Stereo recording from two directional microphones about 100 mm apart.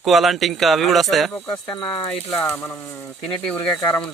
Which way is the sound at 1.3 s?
15° left (ahead or behind).